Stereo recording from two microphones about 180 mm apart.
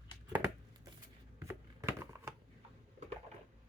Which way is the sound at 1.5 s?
15° right (ahead or behind).